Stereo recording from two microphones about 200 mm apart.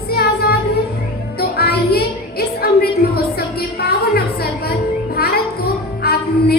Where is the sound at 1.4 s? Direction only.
50° left (ahead or behind).